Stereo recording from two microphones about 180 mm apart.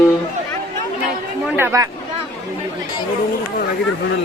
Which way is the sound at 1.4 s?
10° right (ahead or behind).